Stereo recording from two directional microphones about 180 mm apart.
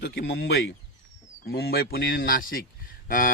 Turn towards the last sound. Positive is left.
turn(degrees=50)  # may be behind; listen again after turning